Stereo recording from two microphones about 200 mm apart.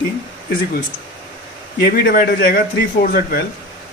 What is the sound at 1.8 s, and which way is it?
Speech, 50° left (ahead or behind).